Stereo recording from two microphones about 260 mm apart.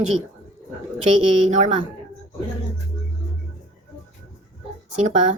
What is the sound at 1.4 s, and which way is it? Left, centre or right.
Speech, right.